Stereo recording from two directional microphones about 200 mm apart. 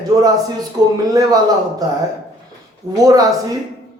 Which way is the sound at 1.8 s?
20° right (ahead or behind).